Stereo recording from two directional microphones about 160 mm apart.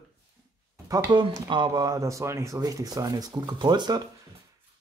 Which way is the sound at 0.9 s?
25° right (ahead or behind).